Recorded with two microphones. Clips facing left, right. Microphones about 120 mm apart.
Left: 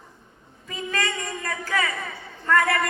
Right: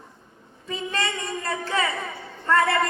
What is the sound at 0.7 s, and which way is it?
A woman's voice, 25° right (ahead or behind).